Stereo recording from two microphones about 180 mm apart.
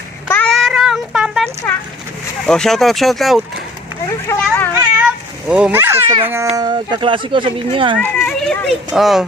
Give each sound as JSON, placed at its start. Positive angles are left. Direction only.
{"t": 0.3, "sound": "child singing", "side_deg": 5}
{"t": 2.5, "sound": "speech", "side_deg": 5}
{"t": 4.3, "sound": "speech", "side_deg": 10}
{"t": 4.9, "sound": "a sound", "side_deg": -5}
{"t": 6.2, "sound": "a child's voice", "side_deg": -15}
{"t": 7.9, "sound": "speech", "side_deg": 5}